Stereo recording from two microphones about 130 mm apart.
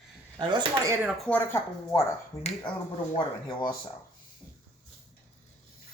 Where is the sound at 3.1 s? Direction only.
40° left (ahead or behind).